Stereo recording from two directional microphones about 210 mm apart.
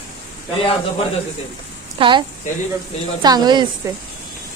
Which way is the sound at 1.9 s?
25° right (ahead or behind).